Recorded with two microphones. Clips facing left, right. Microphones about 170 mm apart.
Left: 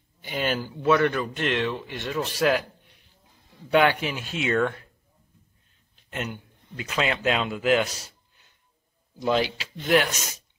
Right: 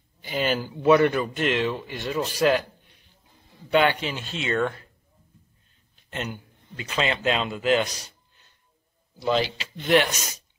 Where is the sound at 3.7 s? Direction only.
5° left (ahead or behind).